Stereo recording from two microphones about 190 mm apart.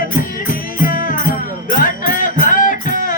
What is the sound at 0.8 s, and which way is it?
Music, 45° left (ahead or behind).